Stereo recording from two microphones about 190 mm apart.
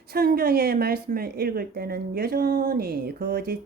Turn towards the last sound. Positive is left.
turn(degrees=-55)  # may be behind; listen again after turning